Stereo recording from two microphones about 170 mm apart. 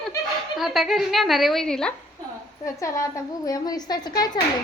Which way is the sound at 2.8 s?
20° left (ahead or behind).